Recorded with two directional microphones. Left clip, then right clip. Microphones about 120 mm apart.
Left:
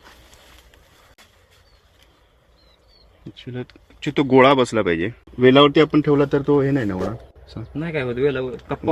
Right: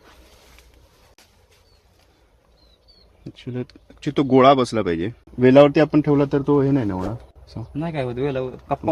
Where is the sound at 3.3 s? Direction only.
65° right (ahead or behind).